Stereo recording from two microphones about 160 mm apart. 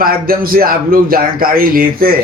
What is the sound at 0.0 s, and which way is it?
A man's voice, 65° right (ahead or behind).